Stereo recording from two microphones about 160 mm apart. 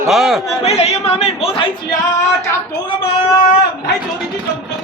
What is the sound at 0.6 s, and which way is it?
Speech, 40° left (ahead or behind).